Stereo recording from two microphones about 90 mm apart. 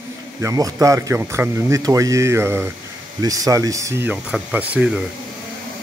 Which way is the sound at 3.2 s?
40° right (ahead or behind).